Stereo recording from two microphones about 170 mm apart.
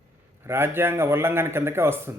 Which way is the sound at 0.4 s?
15° right (ahead or behind).